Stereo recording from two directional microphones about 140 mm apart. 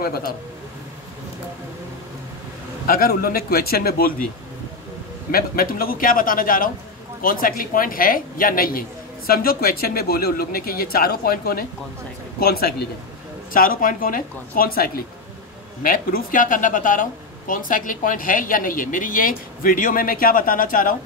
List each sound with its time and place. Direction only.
0.0 s a man's voice: 90° left
2.9 s a man's voice: 90° left
5.3 s a man's voice: 90° left